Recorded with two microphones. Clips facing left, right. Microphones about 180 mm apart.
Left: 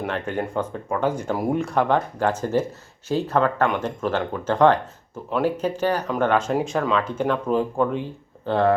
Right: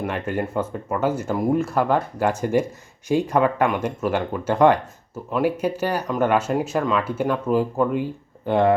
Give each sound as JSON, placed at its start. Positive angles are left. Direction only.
{"t": 0.0, "sound": "speech", "side_deg": -5}